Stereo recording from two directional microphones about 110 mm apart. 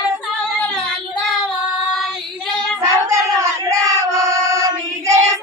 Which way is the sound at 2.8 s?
30° right (ahead or behind).